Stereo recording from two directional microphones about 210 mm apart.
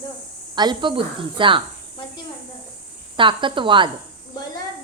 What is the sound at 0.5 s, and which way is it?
Speech, 20° right (ahead or behind).